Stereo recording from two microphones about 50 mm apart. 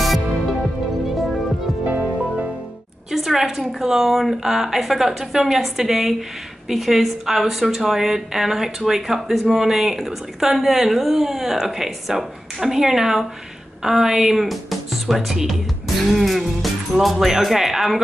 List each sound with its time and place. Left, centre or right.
1.0 s music: centre
1.9 s music: right
3.1 s a woman's voice: centre